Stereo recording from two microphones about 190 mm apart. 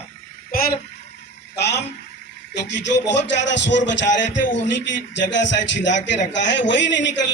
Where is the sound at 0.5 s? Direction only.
50° left (ahead or behind).